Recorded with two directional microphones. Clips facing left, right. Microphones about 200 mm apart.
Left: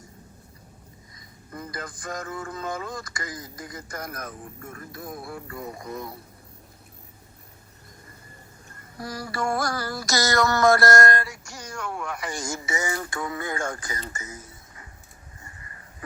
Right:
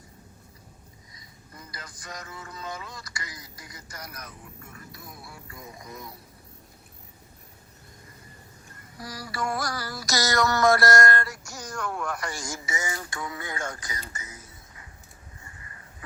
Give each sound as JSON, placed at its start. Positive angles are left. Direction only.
{"t": 1.1, "sound": "speech", "side_deg": 50}
{"t": 9.0, "sound": "speech", "side_deg": 50}
{"t": 11.5, "sound": "speech", "side_deg": 10}
{"t": 12.4, "sound": "speech", "side_deg": 55}